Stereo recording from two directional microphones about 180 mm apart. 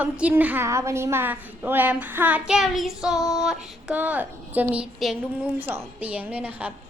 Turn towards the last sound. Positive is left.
turn(degrees=-10)  # may be behind; listen again after turning